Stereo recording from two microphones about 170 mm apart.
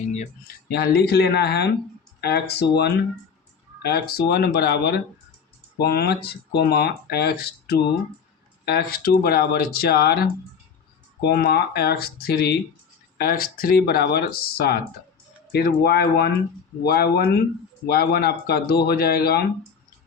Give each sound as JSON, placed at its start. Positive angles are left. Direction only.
{"t": 0.4, "sound": "speech", "side_deg": 70}
{"t": 3.8, "sound": "speech", "side_deg": 70}